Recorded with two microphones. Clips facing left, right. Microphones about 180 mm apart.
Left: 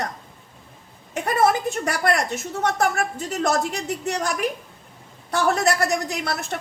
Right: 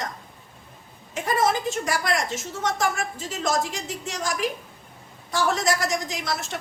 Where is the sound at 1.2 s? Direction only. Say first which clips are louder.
Left 3 dB; 60° left (ahead or behind).